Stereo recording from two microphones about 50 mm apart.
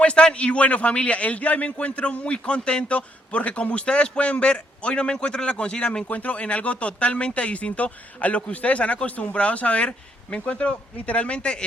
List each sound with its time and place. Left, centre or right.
0.0 s a man's voice: left
6.1 s a man's voice: left